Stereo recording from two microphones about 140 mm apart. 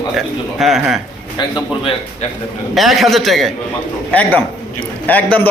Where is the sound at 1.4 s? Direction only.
35° left (ahead or behind).